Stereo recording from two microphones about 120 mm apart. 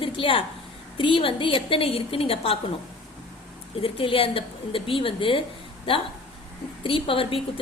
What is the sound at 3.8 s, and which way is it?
A woman's voice, 50° left (ahead or behind).